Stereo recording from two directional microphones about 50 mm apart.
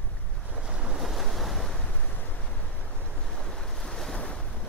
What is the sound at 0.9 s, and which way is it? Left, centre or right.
Waves, centre.